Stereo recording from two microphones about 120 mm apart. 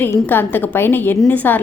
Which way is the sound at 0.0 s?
15° left (ahead or behind).